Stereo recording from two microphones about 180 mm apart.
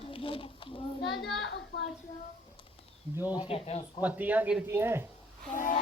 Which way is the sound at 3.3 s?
25° left (ahead or behind).